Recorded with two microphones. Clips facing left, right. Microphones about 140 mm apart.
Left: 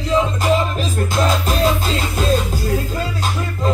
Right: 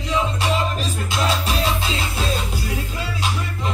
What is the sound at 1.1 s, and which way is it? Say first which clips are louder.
Music: left 3 dB; 45° left (ahead or behind).